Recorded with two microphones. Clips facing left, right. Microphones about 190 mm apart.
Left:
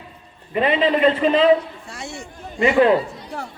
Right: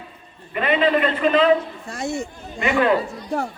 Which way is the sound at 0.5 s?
25° left (ahead or behind).